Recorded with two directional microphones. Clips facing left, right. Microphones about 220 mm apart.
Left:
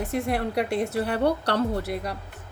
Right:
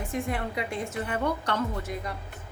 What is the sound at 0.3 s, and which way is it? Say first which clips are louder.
Speech: left 6 dB; 70° left (ahead or behind).